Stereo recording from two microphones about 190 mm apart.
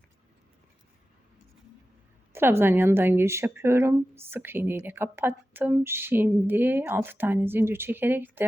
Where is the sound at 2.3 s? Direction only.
10° right (ahead or behind).